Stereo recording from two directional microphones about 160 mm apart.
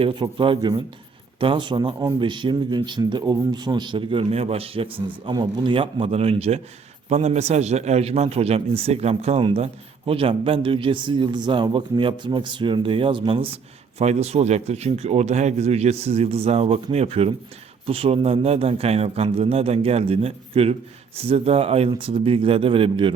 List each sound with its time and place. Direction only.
0.0 s a man's voice: 30° right (ahead or behind)